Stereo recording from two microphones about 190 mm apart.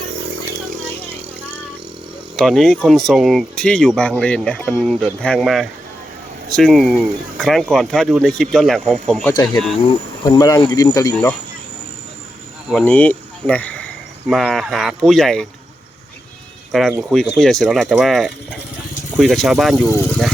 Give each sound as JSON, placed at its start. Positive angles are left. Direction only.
{"t": 2.3, "sound": "speech", "side_deg": 0}
{"t": 12.8, "sound": "speech", "side_deg": 10}
{"t": 16.9, "sound": "speech", "side_deg": 0}